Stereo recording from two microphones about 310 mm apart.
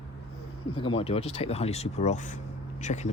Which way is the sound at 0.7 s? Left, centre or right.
Centre.